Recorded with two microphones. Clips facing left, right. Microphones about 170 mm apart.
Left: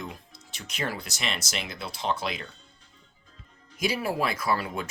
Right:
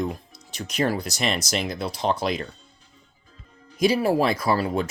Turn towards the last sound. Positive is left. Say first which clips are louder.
# right 6 dB
turn(degrees=-35)  # may be behind; listen again after turning